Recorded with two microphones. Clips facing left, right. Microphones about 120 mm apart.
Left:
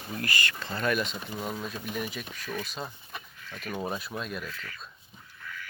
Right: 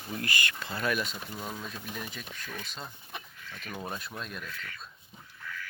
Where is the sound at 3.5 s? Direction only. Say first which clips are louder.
Left 5 dB; 45° left (ahead or behind).